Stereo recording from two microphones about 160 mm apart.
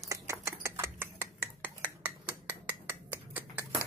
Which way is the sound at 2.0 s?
10° right (ahead or behind).